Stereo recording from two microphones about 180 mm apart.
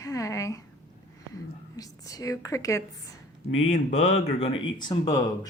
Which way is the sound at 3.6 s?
40° left (ahead or behind).